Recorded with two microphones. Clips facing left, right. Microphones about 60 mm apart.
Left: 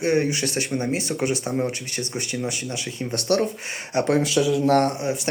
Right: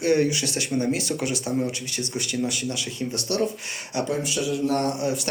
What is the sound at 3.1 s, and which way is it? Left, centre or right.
Speech, left.